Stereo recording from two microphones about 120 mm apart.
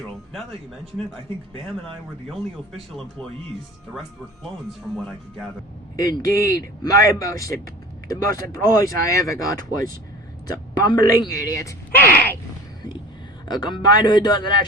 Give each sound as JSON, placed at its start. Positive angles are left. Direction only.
{"t": 2.3, "sound": "speech", "side_deg": 0}
{"t": 4.9, "sound": "speech", "side_deg": 5}
{"t": 6.0, "sound": "speech", "side_deg": 30}
{"t": 11.9, "sound": "a sound", "side_deg": 15}
{"t": 13.7, "sound": "speech", "side_deg": 40}